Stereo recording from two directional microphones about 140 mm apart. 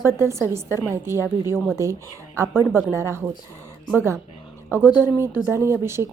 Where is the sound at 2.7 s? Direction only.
20° right (ahead or behind).